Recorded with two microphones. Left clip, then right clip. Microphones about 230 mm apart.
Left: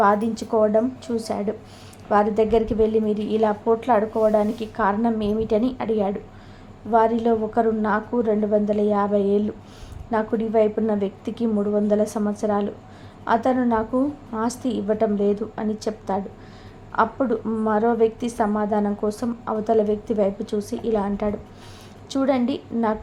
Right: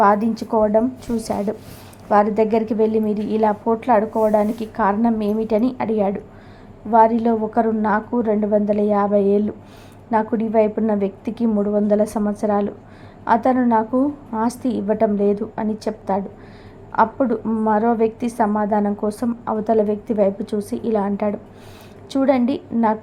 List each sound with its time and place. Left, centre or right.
0.0 s a woman's voice: centre